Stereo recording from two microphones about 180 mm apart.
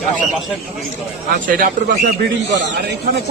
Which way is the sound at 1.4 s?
50° right (ahead or behind).